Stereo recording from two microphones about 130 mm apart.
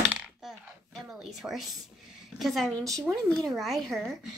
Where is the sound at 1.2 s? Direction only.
Centre (ahead or behind).